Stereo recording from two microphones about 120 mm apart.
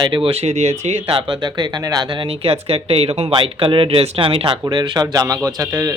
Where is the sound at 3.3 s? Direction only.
45° right (ahead or behind); by 5.9 s 30° right (ahead or behind).